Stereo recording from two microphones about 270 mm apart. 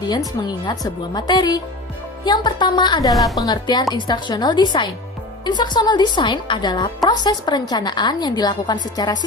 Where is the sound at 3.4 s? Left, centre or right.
Centre.